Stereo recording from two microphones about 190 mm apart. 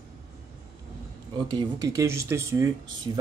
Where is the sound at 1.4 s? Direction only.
20° right (ahead or behind).